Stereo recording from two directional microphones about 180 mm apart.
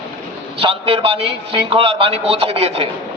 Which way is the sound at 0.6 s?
30° right (ahead or behind).